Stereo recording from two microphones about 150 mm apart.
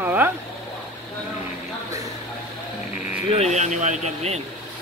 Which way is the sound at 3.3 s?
50° right (ahead or behind).